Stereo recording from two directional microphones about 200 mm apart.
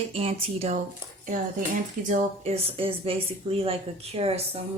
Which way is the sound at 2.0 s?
30° right (ahead or behind).